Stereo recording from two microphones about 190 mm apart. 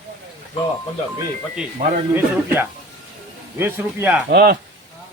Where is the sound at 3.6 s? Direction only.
10° right (ahead or behind).